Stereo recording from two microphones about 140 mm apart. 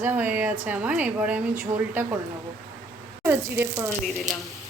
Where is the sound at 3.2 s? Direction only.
20° right (ahead or behind).